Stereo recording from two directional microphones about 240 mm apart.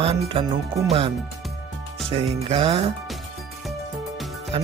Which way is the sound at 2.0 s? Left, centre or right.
Right.